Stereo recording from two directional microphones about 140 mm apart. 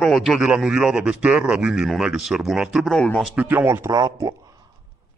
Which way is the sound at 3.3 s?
15° right (ahead or behind).